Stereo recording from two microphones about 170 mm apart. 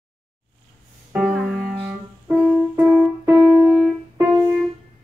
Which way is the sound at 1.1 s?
5° right (ahead or behind).